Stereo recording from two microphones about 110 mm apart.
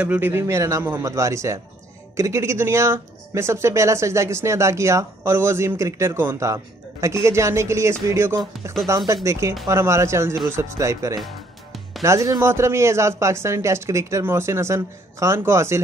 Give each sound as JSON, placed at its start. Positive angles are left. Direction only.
{"t": 0.0, "sound": "speech", "side_deg": -15}